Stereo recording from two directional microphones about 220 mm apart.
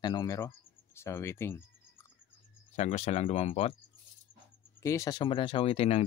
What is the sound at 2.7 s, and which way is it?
Speech, 30° left (ahead or behind).